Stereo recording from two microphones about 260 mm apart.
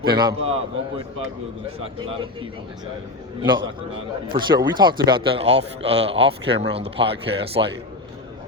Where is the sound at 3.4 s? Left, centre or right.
Centre.